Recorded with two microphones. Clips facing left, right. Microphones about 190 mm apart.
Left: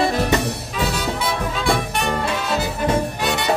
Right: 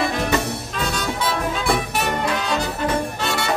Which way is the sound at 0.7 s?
5° left (ahead or behind).